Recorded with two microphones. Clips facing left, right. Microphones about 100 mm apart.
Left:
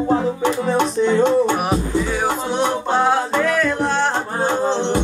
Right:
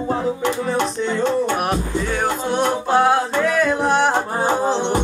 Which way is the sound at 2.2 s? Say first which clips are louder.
Even; centre (ahead or behind).